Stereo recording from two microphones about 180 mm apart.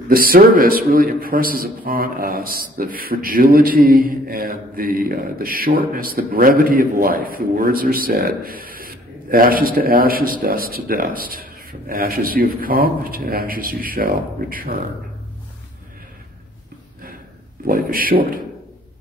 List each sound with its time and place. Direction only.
0.1 s a man's voice: 55° right (ahead or behind)
17.6 s a man's voice: 55° right (ahead or behind)